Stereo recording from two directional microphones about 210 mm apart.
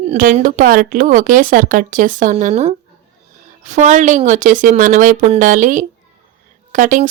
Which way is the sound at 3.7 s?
35° right (ahead or behind).